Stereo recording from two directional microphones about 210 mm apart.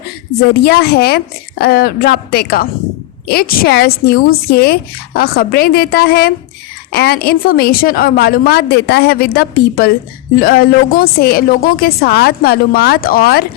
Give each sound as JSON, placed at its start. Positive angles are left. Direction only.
{"t": 0.6, "sound": "speech", "side_deg": 50}